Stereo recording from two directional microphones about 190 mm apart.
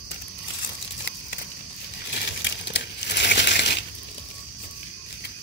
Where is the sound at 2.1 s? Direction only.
65° left (ahead or behind).